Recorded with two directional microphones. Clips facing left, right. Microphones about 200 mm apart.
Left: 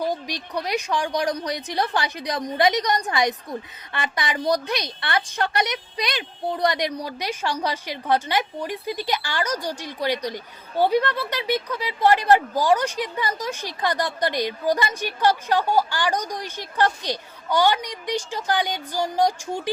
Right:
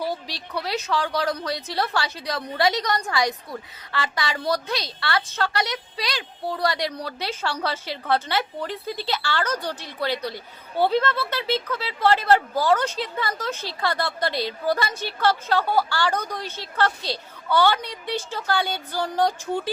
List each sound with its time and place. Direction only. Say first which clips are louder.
0.1 s a woman's voice: left 2 dB; 15° left (ahead or behind)